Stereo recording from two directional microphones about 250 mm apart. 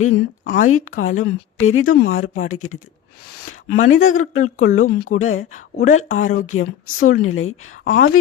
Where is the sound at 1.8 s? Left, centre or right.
Left.